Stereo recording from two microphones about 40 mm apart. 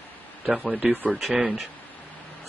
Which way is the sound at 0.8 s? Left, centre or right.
Right.